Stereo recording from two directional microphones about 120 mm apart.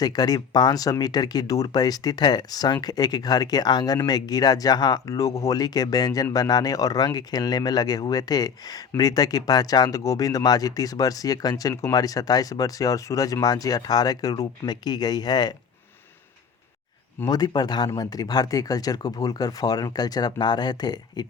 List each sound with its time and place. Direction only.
0.0 s speech: 35° left (ahead or behind)
17.2 s speech: 35° left (ahead or behind)